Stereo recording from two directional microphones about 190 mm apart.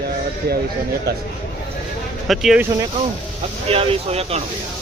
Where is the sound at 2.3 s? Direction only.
Centre (ahead or behind).